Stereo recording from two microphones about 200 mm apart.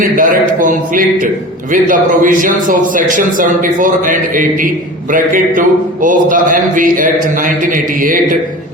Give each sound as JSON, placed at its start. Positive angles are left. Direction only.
{"t": 0.2, "sound": "a man's voice", "side_deg": -45}